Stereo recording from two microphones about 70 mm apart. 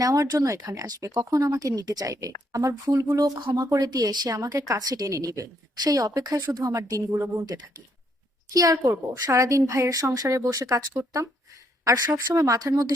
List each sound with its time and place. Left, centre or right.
0.0 s a woman's voice: right
3.7 s speech: right
7.4 s speech: right
8.5 s a woman's voice: right